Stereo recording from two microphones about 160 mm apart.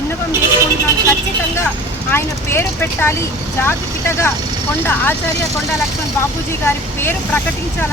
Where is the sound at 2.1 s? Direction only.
15° left (ahead or behind).